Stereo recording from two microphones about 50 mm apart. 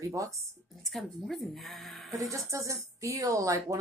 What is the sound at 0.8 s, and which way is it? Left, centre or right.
A woman's voice, centre.